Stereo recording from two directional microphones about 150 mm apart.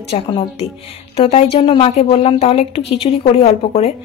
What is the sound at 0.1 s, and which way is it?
A woman's voice, 40° left (ahead or behind).